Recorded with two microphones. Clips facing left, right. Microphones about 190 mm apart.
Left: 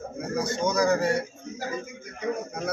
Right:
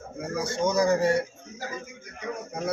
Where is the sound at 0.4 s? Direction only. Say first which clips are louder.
Right 2 dB; 25° right (ahead or behind).